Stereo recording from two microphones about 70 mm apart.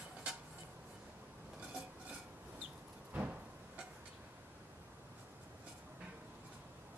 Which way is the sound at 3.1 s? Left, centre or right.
Centre.